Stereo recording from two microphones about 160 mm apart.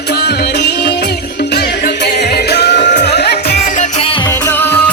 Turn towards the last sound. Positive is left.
turn(degrees=10)  # may be behind; listen again after turning